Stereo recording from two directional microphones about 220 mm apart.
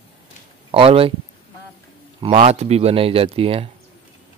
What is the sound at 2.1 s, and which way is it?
Speech, 25° right (ahead or behind).